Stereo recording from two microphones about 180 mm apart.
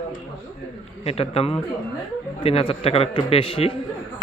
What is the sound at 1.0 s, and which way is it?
A man's voice, 35° left (ahead or behind).